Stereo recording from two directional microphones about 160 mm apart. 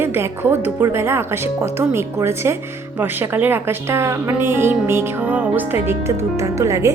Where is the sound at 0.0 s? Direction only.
15° right (ahead or behind).